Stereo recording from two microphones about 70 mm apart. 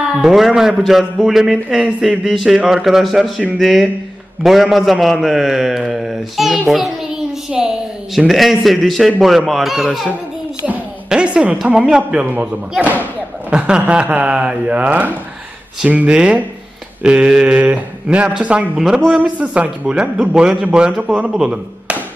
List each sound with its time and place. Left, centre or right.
0.0 s a man's voice: centre
10.6 s a sound: centre
11.5 s a man's voice: centre
13.5 s a man's voice: centre